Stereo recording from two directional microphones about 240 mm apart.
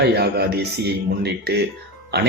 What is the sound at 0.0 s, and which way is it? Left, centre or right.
Speech, right.